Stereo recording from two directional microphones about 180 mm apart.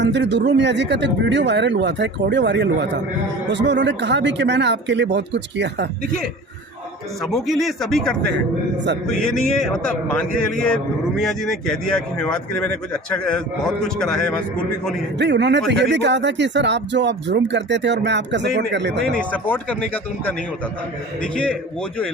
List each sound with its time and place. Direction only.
0.0 s speech: 75° right (ahead or behind)
7.2 s speech: centre (ahead or behind)
15.2 s speech: 75° right (ahead or behind)
19.1 s speech: 5° left (ahead or behind)